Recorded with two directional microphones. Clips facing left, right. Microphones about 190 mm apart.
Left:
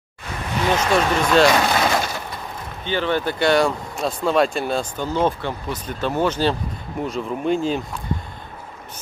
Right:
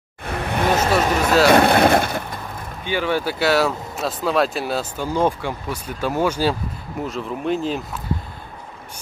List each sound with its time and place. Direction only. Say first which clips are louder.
0.2 s vehicle: right 2 dB; 55° right (ahead or behind)
0.7 s speech: left 1 dB; 5° right (ahead or behind)
1.5 s speech: right 5 dB; 60° right (ahead or behind)
2.8 s speech: even; 10° right (ahead or behind)